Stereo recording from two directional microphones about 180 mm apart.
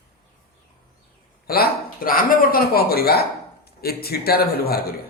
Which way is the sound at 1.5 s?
55° left (ahead or behind).